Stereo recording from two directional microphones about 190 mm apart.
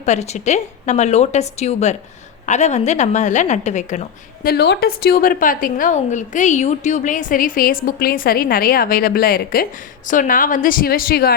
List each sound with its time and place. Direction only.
0.0 s a woman's voice: 35° left (ahead or behind)
4.4 s a woman's voice: 60° left (ahead or behind)